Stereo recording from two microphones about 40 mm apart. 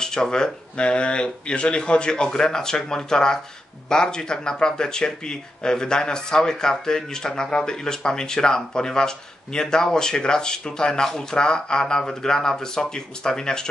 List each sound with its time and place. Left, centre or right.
0.0 s speech: centre